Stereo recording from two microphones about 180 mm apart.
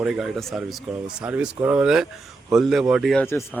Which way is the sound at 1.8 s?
5° right (ahead or behind).